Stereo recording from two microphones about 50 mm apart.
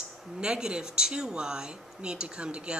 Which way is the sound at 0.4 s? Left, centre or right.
Centre.